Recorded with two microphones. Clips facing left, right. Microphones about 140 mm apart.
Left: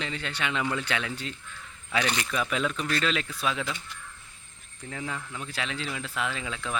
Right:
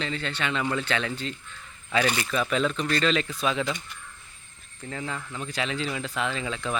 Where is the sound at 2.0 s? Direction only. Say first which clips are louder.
Right 3 dB; 5° right (ahead or behind).